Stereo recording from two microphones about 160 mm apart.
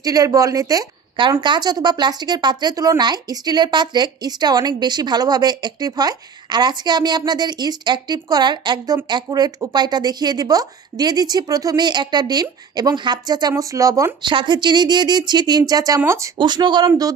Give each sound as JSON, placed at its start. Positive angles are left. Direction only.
{"t": 0.0, "sound": "a woman's voice", "side_deg": -20}
{"t": 16.3, "sound": "speech", "side_deg": -30}